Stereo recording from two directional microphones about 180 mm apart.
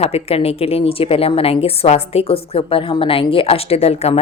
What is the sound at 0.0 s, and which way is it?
A woman's voice, 35° left (ahead or behind).